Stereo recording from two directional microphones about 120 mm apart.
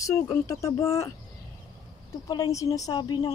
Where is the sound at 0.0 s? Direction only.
25° left (ahead or behind).